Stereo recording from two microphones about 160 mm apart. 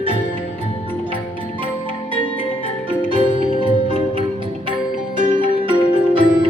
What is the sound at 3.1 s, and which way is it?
Music, 35° right (ahead or behind).